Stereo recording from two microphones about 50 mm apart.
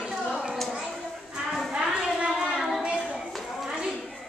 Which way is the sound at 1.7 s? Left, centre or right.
Centre.